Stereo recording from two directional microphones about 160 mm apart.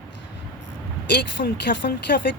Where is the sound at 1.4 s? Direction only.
90° left.